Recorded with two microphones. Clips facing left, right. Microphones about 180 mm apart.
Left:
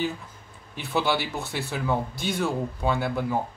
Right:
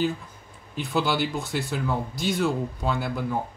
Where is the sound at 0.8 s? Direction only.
Centre (ahead or behind).